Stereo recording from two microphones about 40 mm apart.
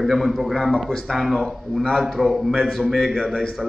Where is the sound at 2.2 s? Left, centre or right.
Centre.